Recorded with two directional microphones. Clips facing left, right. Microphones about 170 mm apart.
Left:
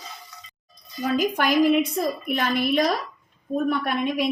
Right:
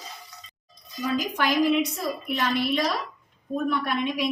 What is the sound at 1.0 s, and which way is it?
A woman's voice, 55° left (ahead or behind).